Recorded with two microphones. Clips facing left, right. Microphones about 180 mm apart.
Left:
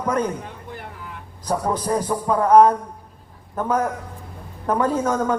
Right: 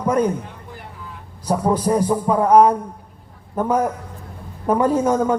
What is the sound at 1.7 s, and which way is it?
Speech, 10° right (ahead or behind).